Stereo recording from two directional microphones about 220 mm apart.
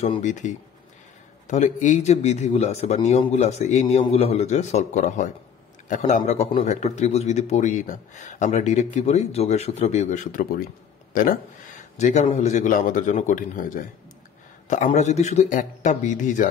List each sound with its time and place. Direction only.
0.0 s a man's voice: 30° left (ahead or behind)